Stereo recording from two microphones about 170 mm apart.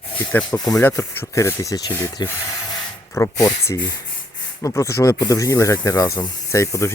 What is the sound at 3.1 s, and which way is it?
Speech, 20° left (ahead or behind).